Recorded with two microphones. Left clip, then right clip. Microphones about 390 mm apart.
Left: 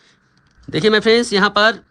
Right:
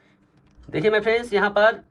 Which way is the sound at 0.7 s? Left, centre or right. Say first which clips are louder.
Left 6 dB; left.